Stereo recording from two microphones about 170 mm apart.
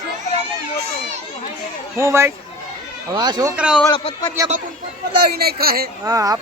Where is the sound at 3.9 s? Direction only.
30° left (ahead or behind).